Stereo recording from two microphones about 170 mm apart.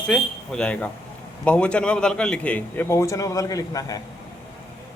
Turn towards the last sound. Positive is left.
turn(degrees=20)  # may be behind; listen again after turning